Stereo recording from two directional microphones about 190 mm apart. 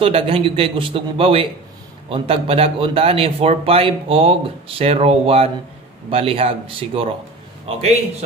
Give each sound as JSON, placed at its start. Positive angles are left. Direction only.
{"t": 0.0, "sound": "a man's voice", "side_deg": -30}